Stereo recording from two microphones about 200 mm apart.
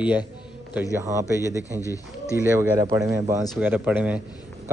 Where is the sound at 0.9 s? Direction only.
15° right (ahead or behind).